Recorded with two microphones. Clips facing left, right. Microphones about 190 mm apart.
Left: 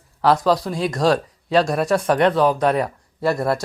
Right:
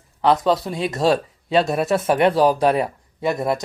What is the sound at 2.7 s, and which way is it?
Speech, 25° right (ahead or behind).